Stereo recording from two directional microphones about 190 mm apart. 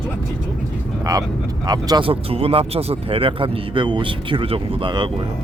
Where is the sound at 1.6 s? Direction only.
20° right (ahead or behind).